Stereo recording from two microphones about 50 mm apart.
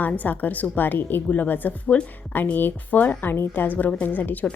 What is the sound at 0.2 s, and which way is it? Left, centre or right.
A woman's voice, left.